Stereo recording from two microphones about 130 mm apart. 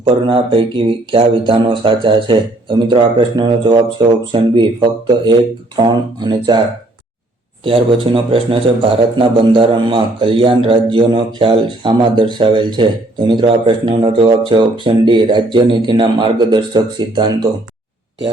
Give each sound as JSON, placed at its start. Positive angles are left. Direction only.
{"t": 0.0, "sound": "speech", "side_deg": -40}
{"t": 7.6, "sound": "speech", "side_deg": -40}